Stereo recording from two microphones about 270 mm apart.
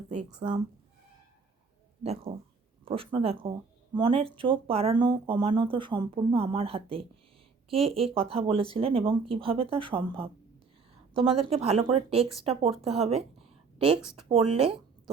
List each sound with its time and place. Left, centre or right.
0.1 s speech: right
2.3 s a woman's voice: right